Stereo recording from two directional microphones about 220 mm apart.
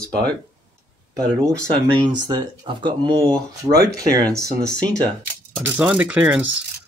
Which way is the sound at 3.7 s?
45° right (ahead or behind).